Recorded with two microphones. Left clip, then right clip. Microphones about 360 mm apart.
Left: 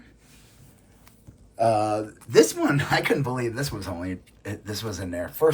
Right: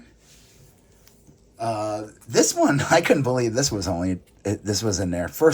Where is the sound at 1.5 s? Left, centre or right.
Centre; by 5.1 s right.